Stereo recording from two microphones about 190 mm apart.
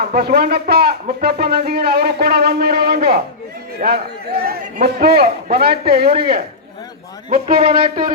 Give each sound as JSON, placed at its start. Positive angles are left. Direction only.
{"t": 0.0, "sound": "speech", "side_deg": -60}